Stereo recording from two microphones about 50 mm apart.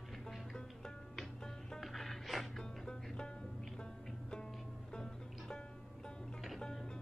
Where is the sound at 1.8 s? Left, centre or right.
Centre.